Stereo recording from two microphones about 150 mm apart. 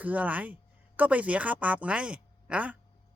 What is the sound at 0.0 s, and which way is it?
A man's voice, 10° right (ahead or behind).